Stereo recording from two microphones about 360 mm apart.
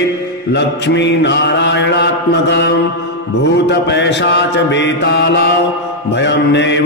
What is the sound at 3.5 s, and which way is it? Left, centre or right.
Mantra, left.